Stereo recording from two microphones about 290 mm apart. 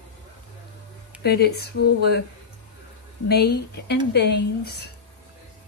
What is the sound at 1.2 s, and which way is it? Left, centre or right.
Speech, left.